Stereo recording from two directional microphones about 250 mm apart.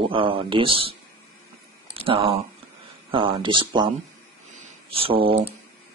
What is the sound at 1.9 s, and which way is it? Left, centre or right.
Speech, right.